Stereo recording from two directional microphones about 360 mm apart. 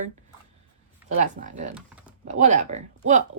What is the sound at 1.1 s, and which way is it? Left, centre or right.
Speech, right.